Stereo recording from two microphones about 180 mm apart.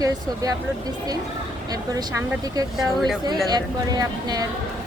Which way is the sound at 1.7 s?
20° right (ahead or behind).